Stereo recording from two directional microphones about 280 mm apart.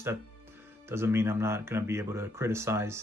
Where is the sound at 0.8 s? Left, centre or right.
Centre.